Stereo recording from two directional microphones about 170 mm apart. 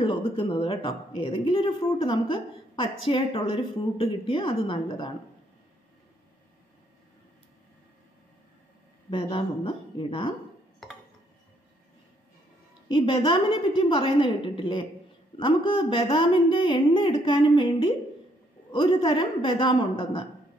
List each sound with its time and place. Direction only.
0.0 s speech: 30° left (ahead or behind)
9.1 s speech: 30° left (ahead or behind)
12.8 s speech: 30° left (ahead or behind)